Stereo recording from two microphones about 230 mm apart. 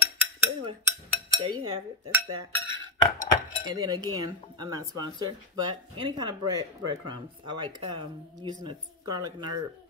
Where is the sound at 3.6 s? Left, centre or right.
Centre.